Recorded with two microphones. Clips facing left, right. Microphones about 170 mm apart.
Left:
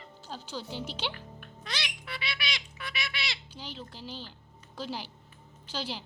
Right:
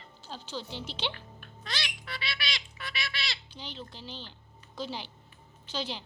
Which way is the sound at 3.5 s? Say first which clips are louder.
Even; 5° left (ahead or behind).